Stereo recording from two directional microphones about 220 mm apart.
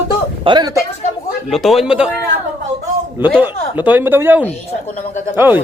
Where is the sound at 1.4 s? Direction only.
Centre (ahead or behind).